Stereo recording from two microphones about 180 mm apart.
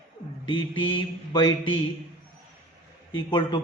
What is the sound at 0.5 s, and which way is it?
Mantra, 90° left.